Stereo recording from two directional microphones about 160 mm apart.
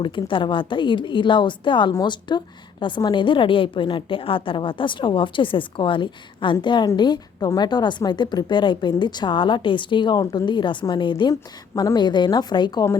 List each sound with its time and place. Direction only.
0.0 s a woman's voice: 30° left (ahead or behind)